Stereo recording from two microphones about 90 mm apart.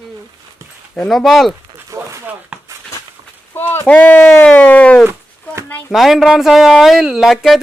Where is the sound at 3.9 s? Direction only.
15° left (ahead or behind).